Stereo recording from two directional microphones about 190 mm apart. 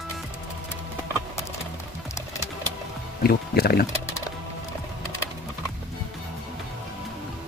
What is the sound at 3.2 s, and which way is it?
Speech, 55° left (ahead or behind).